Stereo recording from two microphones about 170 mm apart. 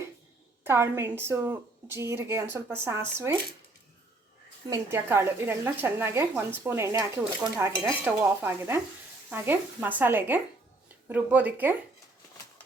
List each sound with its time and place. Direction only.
0.6 s a woman's voice: 15° right (ahead or behind)
4.7 s a woman's voice: 15° right (ahead or behind)